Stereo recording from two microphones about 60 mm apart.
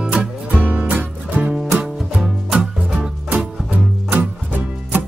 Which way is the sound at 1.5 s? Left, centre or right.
Centre.